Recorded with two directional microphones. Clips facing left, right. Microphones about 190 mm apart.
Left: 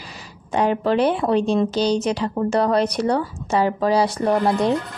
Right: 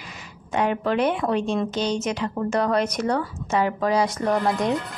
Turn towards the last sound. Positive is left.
turn(degrees=30)  # may be behind; listen again after turning